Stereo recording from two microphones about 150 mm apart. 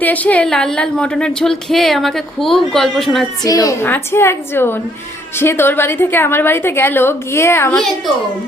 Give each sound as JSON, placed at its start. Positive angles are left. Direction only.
{"t": 0.0, "sound": "a woman's voice", "side_deg": 10}
{"t": 3.4, "sound": "a woman's voice", "side_deg": 25}
{"t": 7.8, "sound": "a woman's voice", "side_deg": 0}